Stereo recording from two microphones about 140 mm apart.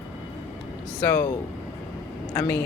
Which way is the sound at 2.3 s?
15° left (ahead or behind).